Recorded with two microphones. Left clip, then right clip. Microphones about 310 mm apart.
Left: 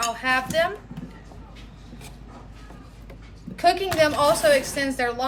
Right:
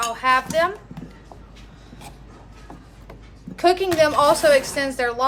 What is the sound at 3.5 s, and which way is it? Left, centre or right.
A woman's voice, centre.